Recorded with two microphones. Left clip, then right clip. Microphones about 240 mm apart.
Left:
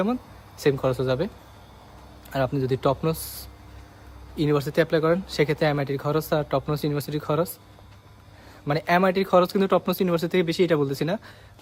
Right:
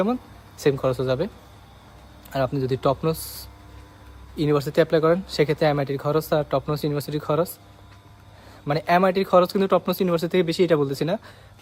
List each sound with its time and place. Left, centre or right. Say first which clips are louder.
0.6 s speech: right 1 dB; centre
2.3 s speech: right 1 dB; centre
4.4 s speech: right 2 dB; centre
8.6 s speech: right 2 dB; centre